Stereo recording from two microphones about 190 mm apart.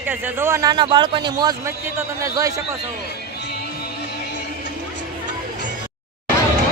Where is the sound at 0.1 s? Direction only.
10° right (ahead or behind).